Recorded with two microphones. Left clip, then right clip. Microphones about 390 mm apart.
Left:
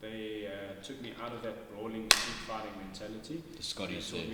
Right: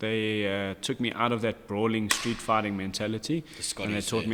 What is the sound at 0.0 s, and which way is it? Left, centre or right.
A man's voice, right.